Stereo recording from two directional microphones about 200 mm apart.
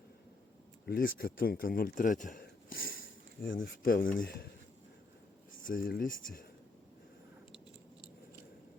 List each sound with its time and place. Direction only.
0.9 s speech: 50° left (ahead or behind)
5.6 s speech: 45° left (ahead or behind)